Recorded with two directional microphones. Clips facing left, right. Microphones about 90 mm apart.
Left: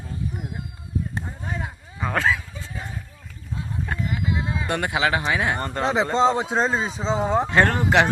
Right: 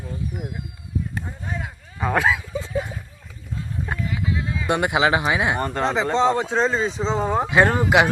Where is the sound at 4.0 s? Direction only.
25° left (ahead or behind).